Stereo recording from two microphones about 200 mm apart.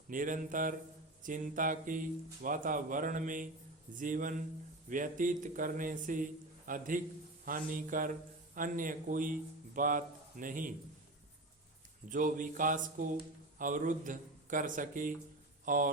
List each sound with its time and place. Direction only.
0.1 s a man's voice: 40° right (ahead or behind)
12.0 s speech: 40° right (ahead or behind)